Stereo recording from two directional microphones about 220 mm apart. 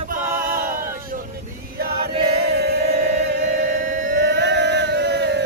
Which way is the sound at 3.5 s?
40° right (ahead or behind).